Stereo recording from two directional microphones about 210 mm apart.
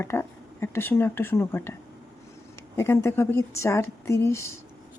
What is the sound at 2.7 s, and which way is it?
Speech, 10° left (ahead or behind).